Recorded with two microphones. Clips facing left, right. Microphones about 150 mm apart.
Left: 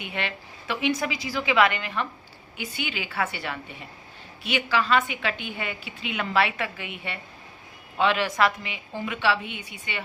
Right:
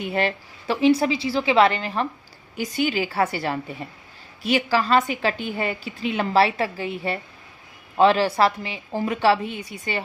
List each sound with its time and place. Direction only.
0.0 s a woman's voice: 40° right (ahead or behind)